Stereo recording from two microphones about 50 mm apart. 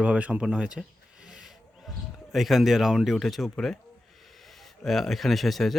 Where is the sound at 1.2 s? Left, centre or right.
Centre.